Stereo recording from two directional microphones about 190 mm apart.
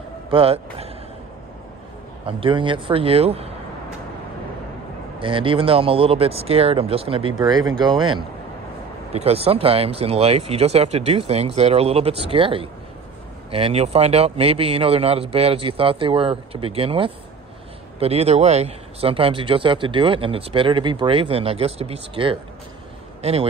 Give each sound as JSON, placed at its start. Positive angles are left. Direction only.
{"t": 0.3, "sound": "speech", "side_deg": -30}
{"t": 2.2, "sound": "speech", "side_deg": -25}
{"t": 5.2, "sound": "speech", "side_deg": -25}